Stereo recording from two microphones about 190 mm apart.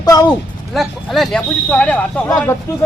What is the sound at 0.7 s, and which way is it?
A man's voice, centre (ahead or behind).